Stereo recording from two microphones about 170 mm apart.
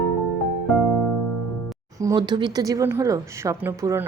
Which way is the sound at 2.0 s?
20° right (ahead or behind).